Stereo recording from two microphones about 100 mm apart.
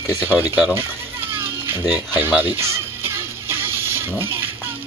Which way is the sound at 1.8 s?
20° right (ahead or behind).